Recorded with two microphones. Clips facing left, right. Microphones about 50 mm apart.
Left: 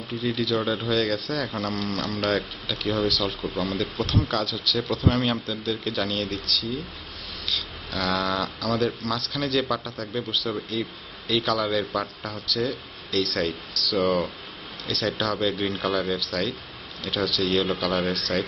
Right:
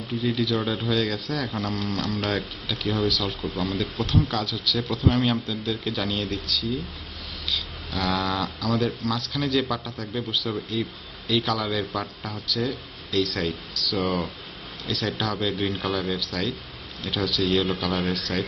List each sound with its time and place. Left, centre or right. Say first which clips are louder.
0.2 s speech: even; centre
7.4 s speech: even; centre